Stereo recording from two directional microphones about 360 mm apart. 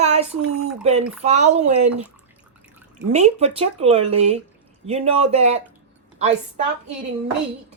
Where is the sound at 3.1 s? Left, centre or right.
Centre.